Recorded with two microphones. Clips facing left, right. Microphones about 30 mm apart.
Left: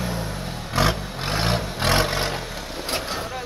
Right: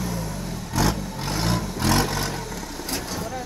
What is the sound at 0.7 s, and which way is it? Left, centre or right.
Vehicle, left.